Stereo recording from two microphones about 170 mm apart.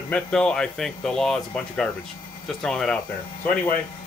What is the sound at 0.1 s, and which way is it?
Speech, 5° left (ahead or behind).